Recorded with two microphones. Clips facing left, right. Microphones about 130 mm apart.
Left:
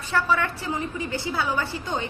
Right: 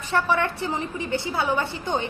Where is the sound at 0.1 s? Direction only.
25° right (ahead or behind).